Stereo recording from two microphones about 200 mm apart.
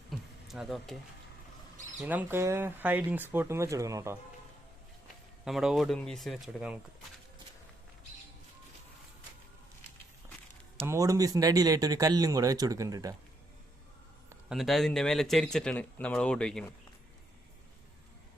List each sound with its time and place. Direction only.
0.1 s a sound: centre (ahead or behind)
2.0 s speech: 10° right (ahead or behind)
5.5 s speech: centre (ahead or behind)
10.8 s speech: 15° right (ahead or behind)
14.5 s speech: centre (ahead or behind)